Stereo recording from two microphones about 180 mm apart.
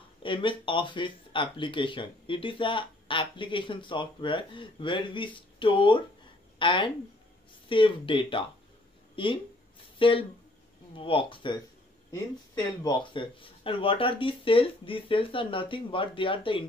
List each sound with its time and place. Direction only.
0.2 s speech: 30° left (ahead or behind)